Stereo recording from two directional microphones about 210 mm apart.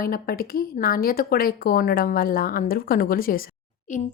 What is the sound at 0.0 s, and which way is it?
A woman's voice, 45° left (ahead or behind).